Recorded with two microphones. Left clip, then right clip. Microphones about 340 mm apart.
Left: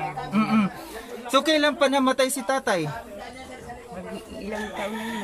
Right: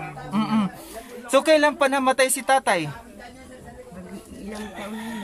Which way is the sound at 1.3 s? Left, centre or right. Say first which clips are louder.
Right 3 dB; right.